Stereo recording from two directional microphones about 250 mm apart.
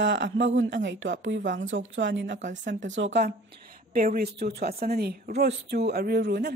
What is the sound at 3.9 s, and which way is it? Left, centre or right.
Speech, right.